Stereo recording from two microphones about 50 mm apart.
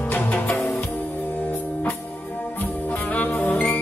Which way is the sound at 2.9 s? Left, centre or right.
Left.